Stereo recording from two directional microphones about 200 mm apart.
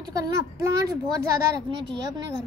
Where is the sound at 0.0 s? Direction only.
20° right (ahead or behind).